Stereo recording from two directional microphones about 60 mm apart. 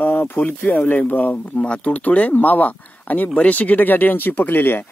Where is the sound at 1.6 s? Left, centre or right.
Centre.